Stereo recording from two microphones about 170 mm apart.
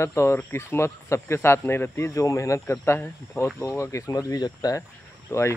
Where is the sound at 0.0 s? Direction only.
15° left (ahead or behind).